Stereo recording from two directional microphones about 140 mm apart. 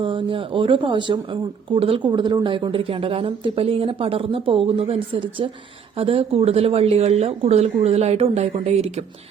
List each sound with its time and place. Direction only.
0.0 s a woman's voice: 35° right (ahead or behind)